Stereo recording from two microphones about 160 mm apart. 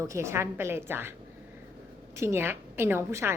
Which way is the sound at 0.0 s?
20° right (ahead or behind).